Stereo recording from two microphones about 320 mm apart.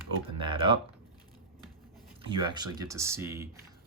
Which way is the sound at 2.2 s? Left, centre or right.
Centre.